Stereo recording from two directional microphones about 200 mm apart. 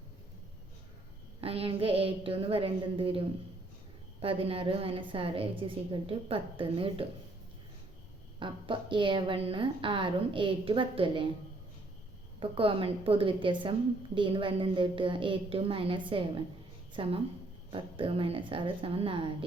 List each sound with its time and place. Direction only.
1.4 s a woman's voice: 30° right (ahead or behind)
8.4 s a woman's voice: 25° right (ahead or behind)
12.4 s a woman's voice: 25° right (ahead or behind)